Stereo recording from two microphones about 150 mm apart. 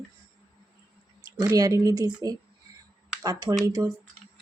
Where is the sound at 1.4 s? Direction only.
25° right (ahead or behind).